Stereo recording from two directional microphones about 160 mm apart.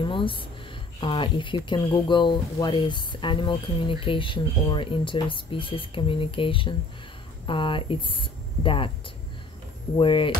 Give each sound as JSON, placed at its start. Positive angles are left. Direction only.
{"t": 0.0, "sound": "a sound", "side_deg": 30}
{"t": 1.0, "sound": "speech", "side_deg": 30}
{"t": 9.9, "sound": "speech", "side_deg": 35}